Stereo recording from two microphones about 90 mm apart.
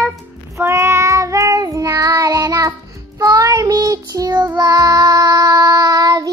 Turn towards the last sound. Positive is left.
turn(degrees=-40)  # may be behind; listen again after turning